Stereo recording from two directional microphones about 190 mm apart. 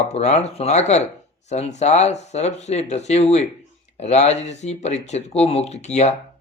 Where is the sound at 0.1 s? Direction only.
35° left (ahead or behind).